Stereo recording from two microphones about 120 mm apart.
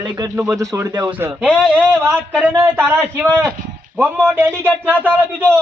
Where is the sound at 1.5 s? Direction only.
Centre (ahead or behind).